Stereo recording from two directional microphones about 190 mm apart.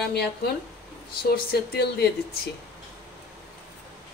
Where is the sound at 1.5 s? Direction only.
55° left (ahead or behind).